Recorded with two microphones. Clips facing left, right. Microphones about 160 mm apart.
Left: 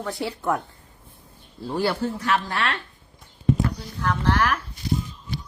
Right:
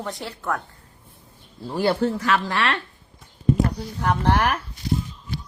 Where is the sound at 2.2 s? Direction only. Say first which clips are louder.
Right 2 dB; 90° right.